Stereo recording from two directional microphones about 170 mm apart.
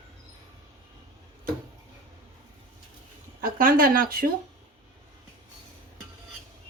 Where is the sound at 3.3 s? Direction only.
60° right (ahead or behind).